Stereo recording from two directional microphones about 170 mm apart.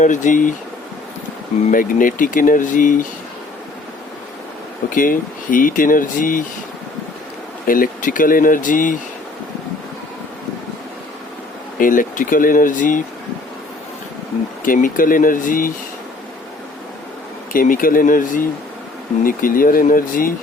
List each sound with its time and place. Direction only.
0.0 s speech: 50° left (ahead or behind)
1.7 s speech: 55° left (ahead or behind)
4.9 s speech: 55° left (ahead or behind)
7.7 s speech: 55° left (ahead or behind)
11.8 s speech: 55° left (ahead or behind)
14.6 s speech: 50° left (ahead or behind)
17.5 s speech: 55° left (ahead or behind)